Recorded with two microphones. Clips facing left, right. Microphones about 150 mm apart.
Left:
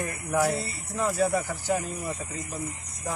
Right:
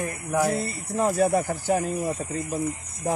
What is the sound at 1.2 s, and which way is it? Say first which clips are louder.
Speech: right 4 dB; 50° right (ahead or behind).